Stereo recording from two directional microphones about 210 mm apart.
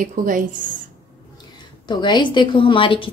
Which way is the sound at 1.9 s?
20° left (ahead or behind).